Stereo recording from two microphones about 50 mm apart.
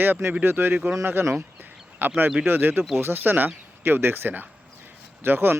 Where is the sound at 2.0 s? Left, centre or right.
Right.